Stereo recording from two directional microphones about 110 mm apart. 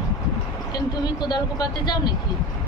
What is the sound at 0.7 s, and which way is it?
Speech, 40° left (ahead or behind).